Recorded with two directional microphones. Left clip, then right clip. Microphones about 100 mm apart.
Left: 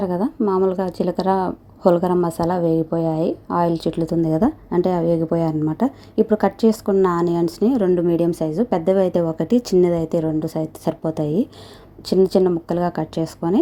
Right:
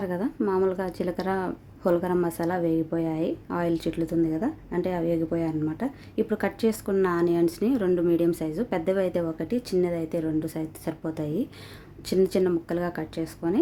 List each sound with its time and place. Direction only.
0.6 s a woman's voice: 30° left (ahead or behind)
4.3 s a woman's voice: 65° left (ahead or behind); by 6.2 s 50° left (ahead or behind)
6.2 s a woman's voice: 35° left (ahead or behind)
9.4 s a woman's voice: 80° left
9.8 s speech: 55° left (ahead or behind)
10.2 s a woman's voice: 35° left (ahead or behind); by 13.6 s 55° left (ahead or behind)